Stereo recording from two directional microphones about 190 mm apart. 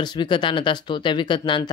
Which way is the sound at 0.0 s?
25° left (ahead or behind).